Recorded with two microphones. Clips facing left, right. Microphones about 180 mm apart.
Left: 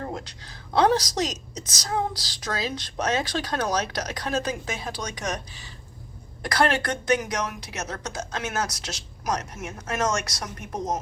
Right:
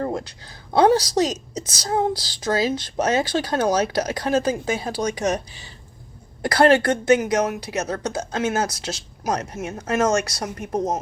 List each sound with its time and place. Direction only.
0.0 s a sound: 35° right (ahead or behind)
0.8 s a woman's voice: 30° right (ahead or behind)
6.4 s a woman's voice: 30° right (ahead or behind)